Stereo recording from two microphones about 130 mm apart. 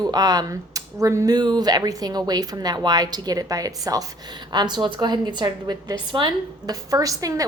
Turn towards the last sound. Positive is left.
turn(degrees=-25)  # may be behind; listen again after turning